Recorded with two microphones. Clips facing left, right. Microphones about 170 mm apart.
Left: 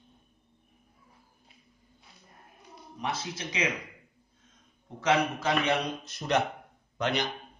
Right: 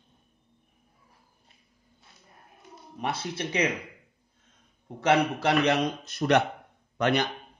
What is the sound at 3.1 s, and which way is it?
Speech, 60° right (ahead or behind).